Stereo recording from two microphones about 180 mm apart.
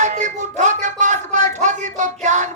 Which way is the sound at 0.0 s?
45° right (ahead or behind).